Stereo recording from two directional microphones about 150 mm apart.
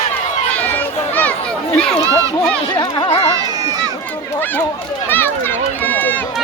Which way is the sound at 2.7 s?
30° left (ahead or behind).